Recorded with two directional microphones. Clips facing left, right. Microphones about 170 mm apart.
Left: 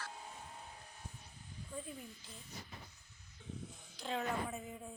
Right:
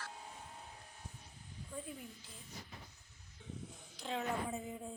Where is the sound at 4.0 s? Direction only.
15° right (ahead or behind).